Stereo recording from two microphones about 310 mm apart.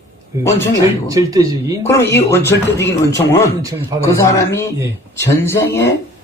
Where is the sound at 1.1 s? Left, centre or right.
Centre.